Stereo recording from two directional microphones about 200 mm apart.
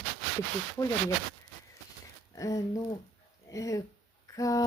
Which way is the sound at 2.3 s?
15° left (ahead or behind).